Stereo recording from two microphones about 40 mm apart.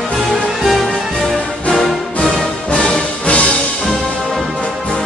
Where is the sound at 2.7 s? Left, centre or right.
Left.